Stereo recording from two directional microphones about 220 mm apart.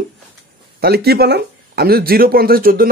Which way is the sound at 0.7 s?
45° right (ahead or behind).